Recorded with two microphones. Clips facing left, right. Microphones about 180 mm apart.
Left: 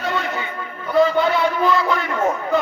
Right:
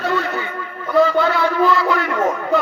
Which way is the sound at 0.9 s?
20° left (ahead or behind).